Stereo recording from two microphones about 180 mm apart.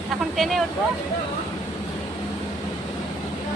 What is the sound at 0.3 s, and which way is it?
Speech, centre (ahead or behind).